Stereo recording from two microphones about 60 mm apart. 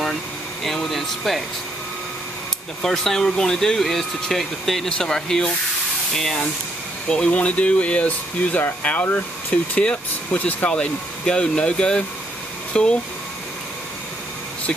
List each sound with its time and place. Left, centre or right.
0.7 s speech: centre
2.8 s speech: centre